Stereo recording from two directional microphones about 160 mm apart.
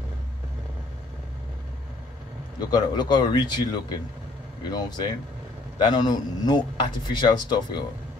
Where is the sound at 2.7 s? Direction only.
25° left (ahead or behind).